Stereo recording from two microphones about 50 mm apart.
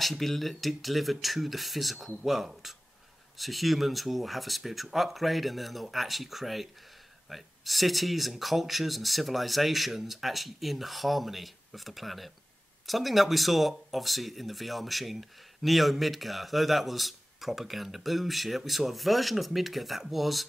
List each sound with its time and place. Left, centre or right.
0.0 s speech: centre